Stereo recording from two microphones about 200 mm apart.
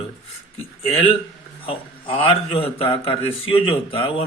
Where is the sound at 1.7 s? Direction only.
25° left (ahead or behind).